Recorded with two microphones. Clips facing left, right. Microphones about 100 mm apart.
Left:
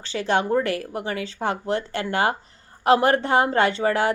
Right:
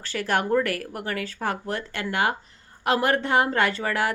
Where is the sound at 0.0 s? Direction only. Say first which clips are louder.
Left 3 dB; 20° left (ahead or behind).